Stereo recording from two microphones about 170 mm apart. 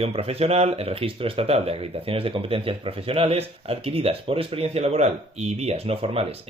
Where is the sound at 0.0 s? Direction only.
35° right (ahead or behind).